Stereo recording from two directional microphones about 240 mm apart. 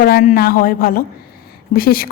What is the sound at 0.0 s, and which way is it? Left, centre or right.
A woman's voice, left.